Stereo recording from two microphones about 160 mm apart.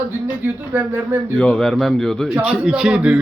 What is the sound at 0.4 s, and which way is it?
Speech, 10° right (ahead or behind).